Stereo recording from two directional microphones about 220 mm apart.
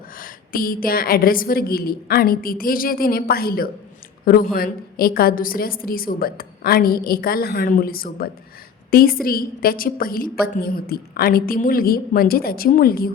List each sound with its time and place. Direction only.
0.2 s a woman's voice: 40° left (ahead or behind)